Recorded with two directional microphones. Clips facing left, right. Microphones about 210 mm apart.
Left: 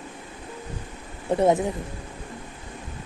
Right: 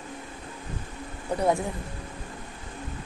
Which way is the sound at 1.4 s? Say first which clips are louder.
Left 5 dB; 20° left (ahead or behind).